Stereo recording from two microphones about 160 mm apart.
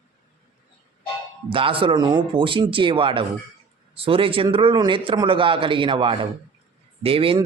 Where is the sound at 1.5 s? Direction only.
35° right (ahead or behind).